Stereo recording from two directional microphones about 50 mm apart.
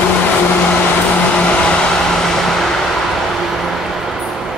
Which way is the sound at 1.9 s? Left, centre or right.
Centre.